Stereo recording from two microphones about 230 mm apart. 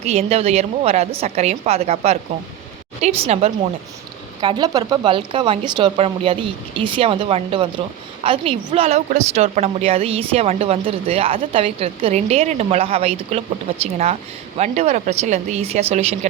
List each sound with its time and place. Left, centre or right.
0.0 s a woman's voice: right